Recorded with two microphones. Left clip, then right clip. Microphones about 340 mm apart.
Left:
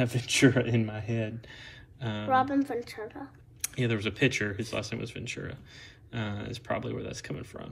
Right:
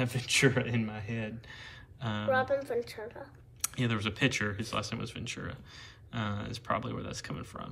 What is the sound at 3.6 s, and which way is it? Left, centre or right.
Speech, centre.